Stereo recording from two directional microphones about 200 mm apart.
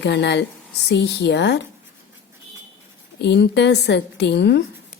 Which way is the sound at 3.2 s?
60° left (ahead or behind).